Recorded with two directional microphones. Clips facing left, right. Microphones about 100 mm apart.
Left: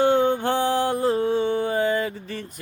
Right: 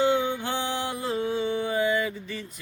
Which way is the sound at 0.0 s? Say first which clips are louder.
Left 5 dB; 50° left (ahead or behind).